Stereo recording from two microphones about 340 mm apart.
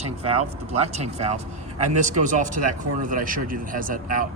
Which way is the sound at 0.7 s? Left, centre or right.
Centre.